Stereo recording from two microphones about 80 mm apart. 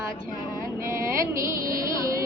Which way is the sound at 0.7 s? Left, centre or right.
Right.